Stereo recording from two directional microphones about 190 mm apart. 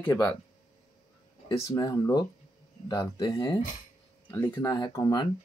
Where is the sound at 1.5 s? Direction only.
20° left (ahead or behind).